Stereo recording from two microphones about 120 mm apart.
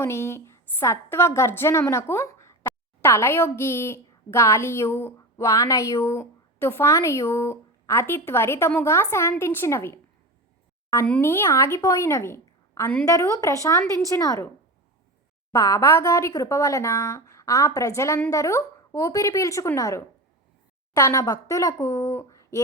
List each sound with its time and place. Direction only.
0.0 s a woman's voice: 20° left (ahead or behind)
11.2 s speech: 20° left (ahead or behind)
11.8 s a woman's voice: 30° left (ahead or behind)
15.5 s speech: 25° left (ahead or behind)